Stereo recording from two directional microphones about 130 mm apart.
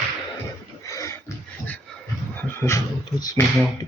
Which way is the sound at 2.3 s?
15° left (ahead or behind).